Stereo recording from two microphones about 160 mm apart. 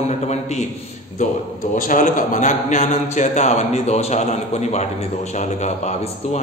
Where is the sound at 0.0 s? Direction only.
45° left (ahead or behind).